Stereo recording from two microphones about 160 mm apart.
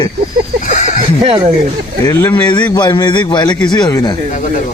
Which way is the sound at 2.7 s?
25° left (ahead or behind).